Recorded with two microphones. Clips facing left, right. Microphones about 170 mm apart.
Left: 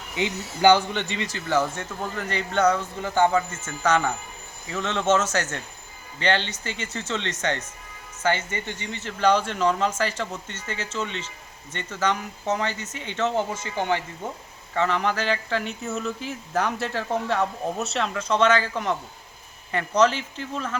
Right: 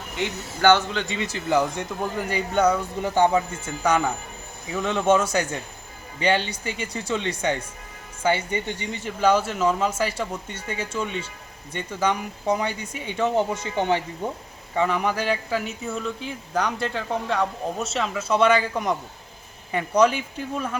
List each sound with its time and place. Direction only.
0.6 s a man's voice: 10° left (ahead or behind)
1.0 s speech: 5° right (ahead or behind)